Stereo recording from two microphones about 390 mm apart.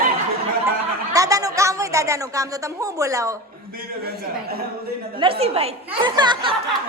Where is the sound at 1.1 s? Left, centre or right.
Centre.